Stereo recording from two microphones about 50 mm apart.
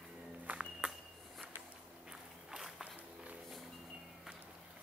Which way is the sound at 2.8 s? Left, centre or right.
Right.